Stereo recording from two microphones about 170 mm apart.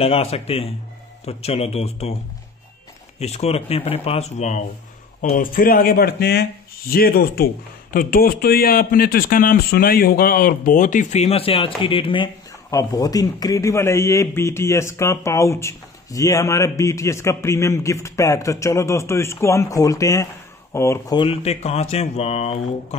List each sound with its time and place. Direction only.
0.0 s speech: 35° left (ahead or behind)
3.2 s speech: 40° left (ahead or behind)
5.3 s a man's voice: 55° left (ahead or behind); by 21.2 s 15° left (ahead or behind)
21.2 s speech: 35° left (ahead or behind)